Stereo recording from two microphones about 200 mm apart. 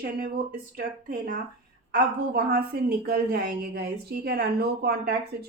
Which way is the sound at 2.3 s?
50° right (ahead or behind).